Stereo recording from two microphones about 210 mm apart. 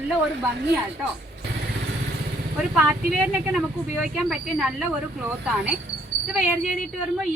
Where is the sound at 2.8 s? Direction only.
5° right (ahead or behind).